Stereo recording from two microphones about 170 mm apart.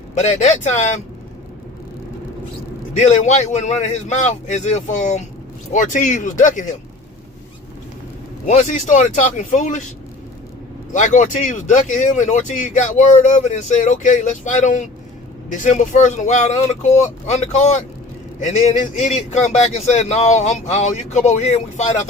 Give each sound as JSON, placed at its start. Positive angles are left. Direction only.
{"t": 0.1, "sound": "speech", "side_deg": 45}
{"t": 2.9, "sound": "speech", "side_deg": 45}
{"t": 8.4, "sound": "speech", "side_deg": 50}
{"t": 10.9, "sound": "speech", "side_deg": 45}